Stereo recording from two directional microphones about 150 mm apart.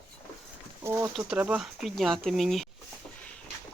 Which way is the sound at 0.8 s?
15° right (ahead or behind).